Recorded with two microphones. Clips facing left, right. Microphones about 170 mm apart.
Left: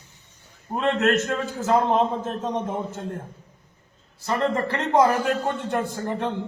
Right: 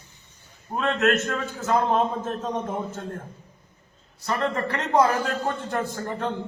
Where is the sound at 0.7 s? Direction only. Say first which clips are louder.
Left 1 dB; 20° left (ahead or behind).